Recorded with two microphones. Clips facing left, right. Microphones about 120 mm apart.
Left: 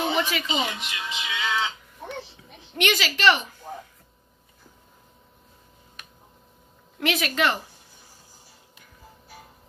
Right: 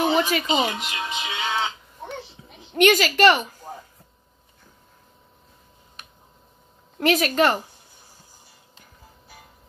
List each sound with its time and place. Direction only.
0.1 s music: 40° right (ahead or behind)
2.7 s a woman's voice: 45° right (ahead or behind)
7.0 s speech: 40° right (ahead or behind)